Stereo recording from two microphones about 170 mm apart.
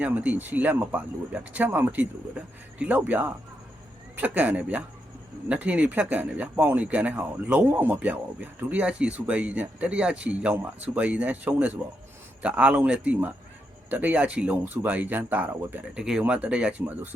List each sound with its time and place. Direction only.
0.0 s speech: 10° right (ahead or behind)